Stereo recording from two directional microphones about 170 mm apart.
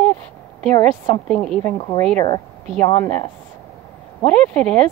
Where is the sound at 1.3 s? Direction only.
5° left (ahead or behind).